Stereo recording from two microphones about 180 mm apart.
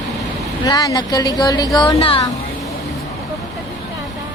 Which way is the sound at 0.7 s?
20° left (ahead or behind).